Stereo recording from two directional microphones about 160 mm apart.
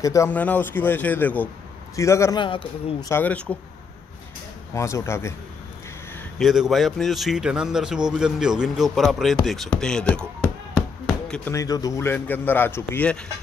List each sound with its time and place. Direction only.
0.0 s speech: 20° left (ahead or behind)
0.3 s a man's voice: 10° left (ahead or behind)
2.4 s a man's voice: 30° left (ahead or behind)
3.1 s a man's voice: 10° left (ahead or behind)
4.7 s a man's voice: 20° left (ahead or behind)
6.3 s speech: centre (ahead or behind)
11.5 s a man's voice: 20° left (ahead or behind)